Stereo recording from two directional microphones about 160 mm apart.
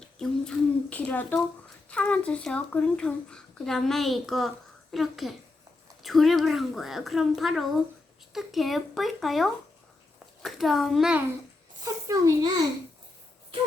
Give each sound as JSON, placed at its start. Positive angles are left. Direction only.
{"t": 0.2, "sound": "speech", "side_deg": 5}
{"t": 12.0, "sound": "a child's voice", "side_deg": -20}